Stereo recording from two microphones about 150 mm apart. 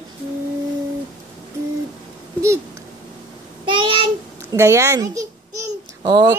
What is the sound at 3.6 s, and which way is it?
Speech, 35° right (ahead or behind).